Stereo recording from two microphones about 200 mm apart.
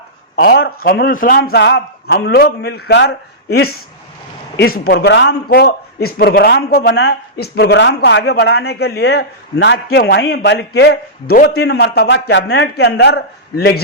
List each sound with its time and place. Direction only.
0.3 s a man's voice: 50° left (ahead or behind)